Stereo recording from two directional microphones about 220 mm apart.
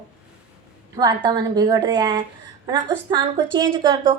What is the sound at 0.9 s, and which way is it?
A woman's voice, 20° right (ahead or behind).